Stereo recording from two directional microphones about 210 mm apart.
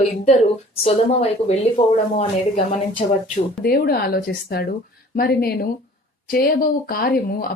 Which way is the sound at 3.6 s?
45° left (ahead or behind).